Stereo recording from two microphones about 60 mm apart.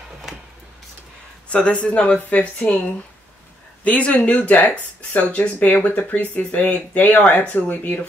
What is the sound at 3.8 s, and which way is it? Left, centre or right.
Speech, left.